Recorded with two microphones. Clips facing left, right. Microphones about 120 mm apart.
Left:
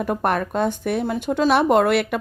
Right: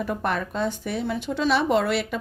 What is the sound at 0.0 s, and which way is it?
Speech, 50° left (ahead or behind).